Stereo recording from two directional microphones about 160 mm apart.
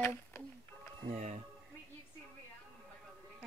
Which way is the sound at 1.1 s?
50° right (ahead or behind).